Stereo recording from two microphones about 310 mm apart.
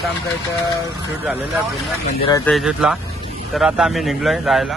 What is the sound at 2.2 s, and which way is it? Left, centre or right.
Speech, centre.